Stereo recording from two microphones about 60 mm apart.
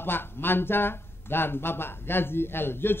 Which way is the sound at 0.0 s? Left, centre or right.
Left.